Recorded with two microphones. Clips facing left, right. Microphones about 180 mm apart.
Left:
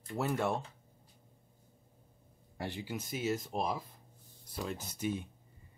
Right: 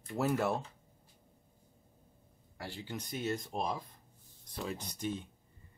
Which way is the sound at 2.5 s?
20° left (ahead or behind).